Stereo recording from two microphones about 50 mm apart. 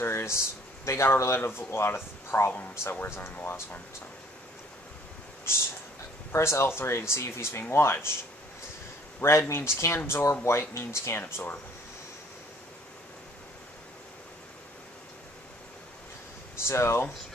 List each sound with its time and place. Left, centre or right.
0.0 s speech: left
6.3 s speech: left
9.2 s speech: left
16.5 s speech: left